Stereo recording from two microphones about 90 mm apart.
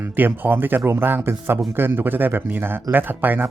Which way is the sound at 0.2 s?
20° right (ahead or behind).